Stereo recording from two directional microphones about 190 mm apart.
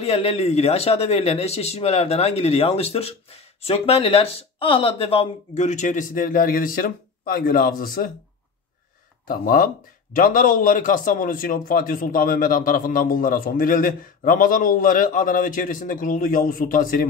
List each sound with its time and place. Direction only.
0.0 s speech: 30° left (ahead or behind); by 8.1 s 45° left (ahead or behind)
9.3 s a man's voice: 50° left (ahead or behind)